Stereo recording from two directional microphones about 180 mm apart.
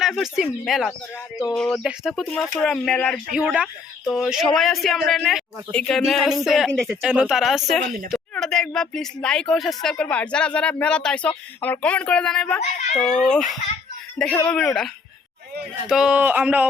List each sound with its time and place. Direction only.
0.0 s speech: centre (ahead or behind)
12.8 s a child's voice: 40° left (ahead or behind)
13.3 s speech: centre (ahead or behind)
15.9 s speech: 5° right (ahead or behind)